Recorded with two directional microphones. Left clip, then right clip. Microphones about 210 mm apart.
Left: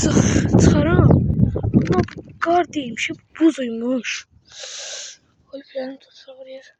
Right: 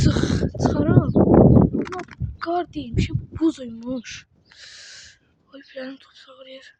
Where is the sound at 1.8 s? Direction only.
10° right (ahead or behind).